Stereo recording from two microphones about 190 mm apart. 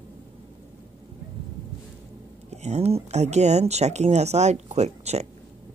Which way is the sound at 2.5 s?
35° right (ahead or behind).